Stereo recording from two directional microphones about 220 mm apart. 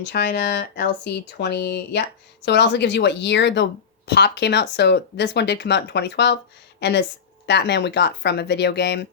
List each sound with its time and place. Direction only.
0.0 s speech: 55° left (ahead or behind)